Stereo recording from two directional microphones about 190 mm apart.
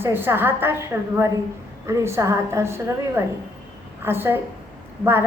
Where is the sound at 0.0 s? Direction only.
10° right (ahead or behind).